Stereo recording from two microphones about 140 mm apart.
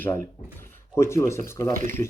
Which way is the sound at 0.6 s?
20° left (ahead or behind).